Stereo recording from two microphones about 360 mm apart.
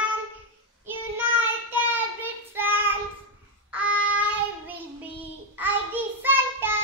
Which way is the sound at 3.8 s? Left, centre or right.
Right.